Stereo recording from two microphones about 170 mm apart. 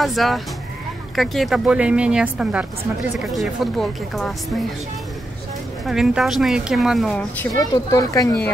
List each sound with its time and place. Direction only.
0.0 s speech: centre (ahead or behind)
5.9 s speech: centre (ahead or behind)
7.5 s speech: 20° left (ahead or behind)